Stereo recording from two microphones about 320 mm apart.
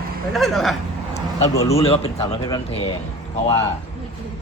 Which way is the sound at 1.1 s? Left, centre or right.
Centre.